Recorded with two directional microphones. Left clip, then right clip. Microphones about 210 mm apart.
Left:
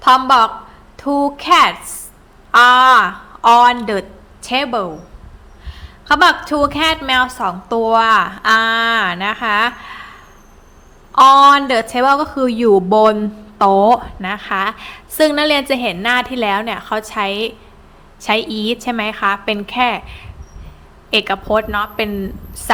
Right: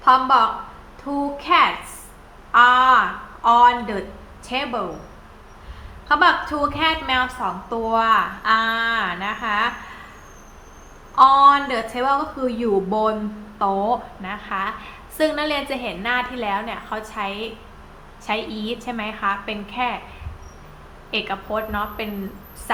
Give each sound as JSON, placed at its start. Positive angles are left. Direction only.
{"t": 0.0, "sound": "a woman's voice", "side_deg": 55}
{"t": 6.1, "sound": "a woman's voice", "side_deg": 55}
{"t": 11.1, "sound": "a woman's voice", "side_deg": 55}
{"t": 21.1, "sound": "a woman's voice", "side_deg": 60}